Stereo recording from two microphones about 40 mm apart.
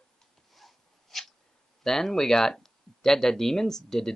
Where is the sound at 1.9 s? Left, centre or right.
Centre.